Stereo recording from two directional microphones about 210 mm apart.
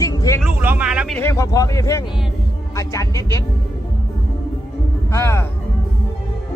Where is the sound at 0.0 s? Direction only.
15° left (ahead or behind).